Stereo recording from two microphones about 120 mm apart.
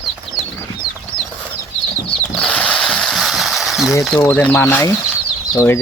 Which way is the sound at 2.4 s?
10° left (ahead or behind).